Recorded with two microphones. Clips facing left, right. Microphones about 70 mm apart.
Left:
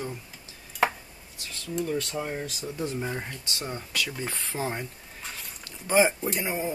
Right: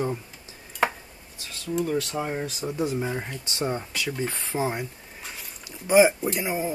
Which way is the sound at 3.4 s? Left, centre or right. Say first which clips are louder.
Right 7 dB; right.